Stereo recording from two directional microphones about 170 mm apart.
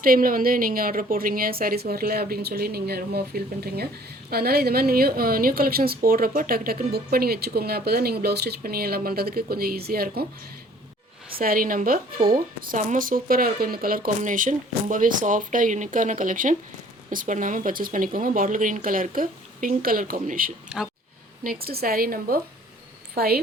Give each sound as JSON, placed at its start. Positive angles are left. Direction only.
{"t": 0.0, "sound": "speech", "side_deg": -55}
{"t": 11.3, "sound": "a woman's voice", "side_deg": -60}
{"t": 20.7, "sound": "speech", "side_deg": -5}
{"t": 21.4, "sound": "a woman's voice", "side_deg": -60}